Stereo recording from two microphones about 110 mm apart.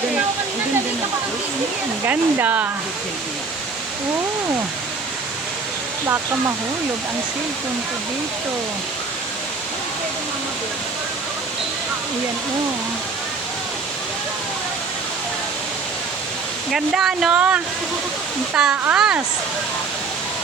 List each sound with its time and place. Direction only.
2.0 s speech: 15° right (ahead or behind)
16.7 s speech: 5° right (ahead or behind)